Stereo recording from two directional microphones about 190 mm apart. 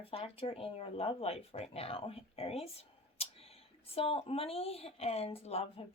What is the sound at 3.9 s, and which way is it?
Speech, 30° left (ahead or behind).